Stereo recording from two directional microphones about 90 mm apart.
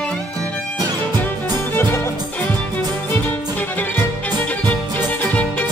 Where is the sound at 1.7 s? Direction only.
25° left (ahead or behind).